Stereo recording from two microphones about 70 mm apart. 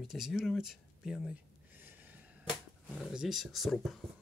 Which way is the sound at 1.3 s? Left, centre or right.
Right.